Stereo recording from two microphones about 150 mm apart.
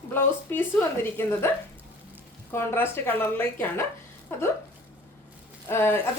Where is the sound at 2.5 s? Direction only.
15° left (ahead or behind).